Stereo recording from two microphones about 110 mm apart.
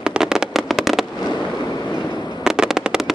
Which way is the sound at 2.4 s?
5° right (ahead or behind).